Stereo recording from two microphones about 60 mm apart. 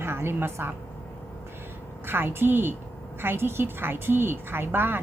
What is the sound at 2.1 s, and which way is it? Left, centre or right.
A woman's voice, right.